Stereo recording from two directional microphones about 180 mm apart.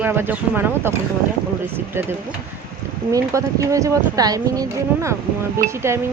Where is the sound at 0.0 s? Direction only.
10° right (ahead or behind).